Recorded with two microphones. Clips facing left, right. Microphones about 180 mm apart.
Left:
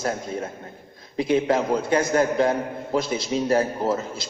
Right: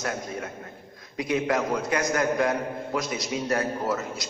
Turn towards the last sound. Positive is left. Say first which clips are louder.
# left 4 dB
turn(degrees=30)  # may be behind; listen again after turning